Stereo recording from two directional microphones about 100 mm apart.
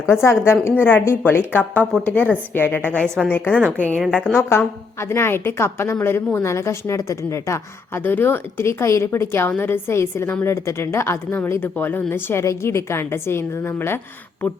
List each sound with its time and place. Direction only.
0.1 s a woman's voice: 25° left (ahead or behind)
8.0 s a woman's voice: 20° left (ahead or behind)